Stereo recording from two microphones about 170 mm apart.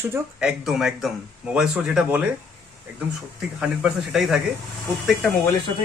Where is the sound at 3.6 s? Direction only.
5° right (ahead or behind).